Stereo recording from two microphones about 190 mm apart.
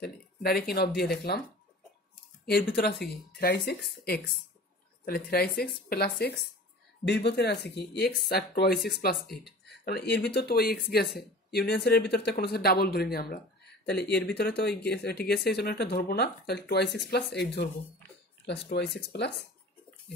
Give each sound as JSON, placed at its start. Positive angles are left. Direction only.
{"t": 0.0, "sound": "speech", "side_deg": 55}
{"t": 2.4, "sound": "speech", "side_deg": 55}